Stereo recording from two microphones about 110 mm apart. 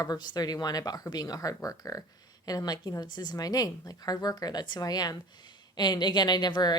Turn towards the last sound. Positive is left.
turn(degrees=40)  # may be behind; listen again after turning